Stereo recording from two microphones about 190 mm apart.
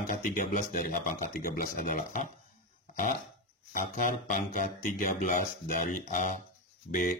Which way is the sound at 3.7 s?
45° left (ahead or behind).